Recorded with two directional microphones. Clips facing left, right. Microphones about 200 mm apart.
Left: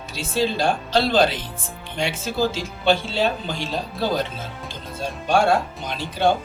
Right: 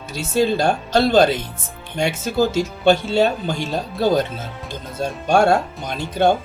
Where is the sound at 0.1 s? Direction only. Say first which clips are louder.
Right 5 dB; 45° right (ahead or behind).